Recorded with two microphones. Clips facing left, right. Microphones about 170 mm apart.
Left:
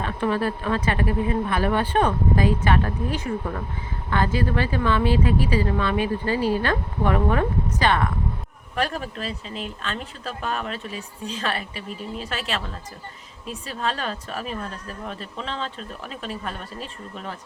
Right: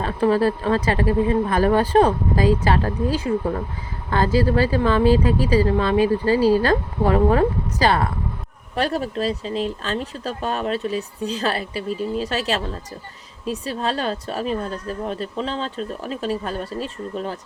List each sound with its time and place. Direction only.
0.0 s speech: 35° right (ahead or behind)